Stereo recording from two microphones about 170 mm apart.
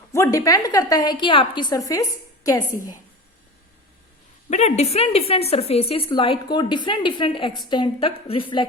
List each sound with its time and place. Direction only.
0.1 s a woman's voice: 20° left (ahead or behind)
4.4 s a woman's voice: 40° left (ahead or behind)